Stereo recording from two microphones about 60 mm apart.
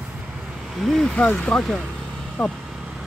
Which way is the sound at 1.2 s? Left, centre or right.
Centre.